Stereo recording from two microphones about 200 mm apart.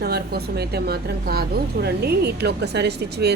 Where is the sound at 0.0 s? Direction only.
50° right (ahead or behind).